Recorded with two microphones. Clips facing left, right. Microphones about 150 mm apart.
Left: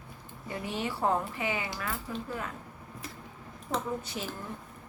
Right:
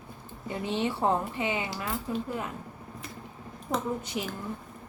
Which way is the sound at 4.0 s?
15° right (ahead or behind).